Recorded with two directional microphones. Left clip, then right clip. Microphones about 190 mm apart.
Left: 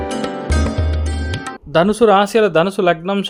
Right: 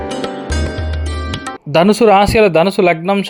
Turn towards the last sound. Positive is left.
turn(degrees=-5)  # may be behind; listen again after turning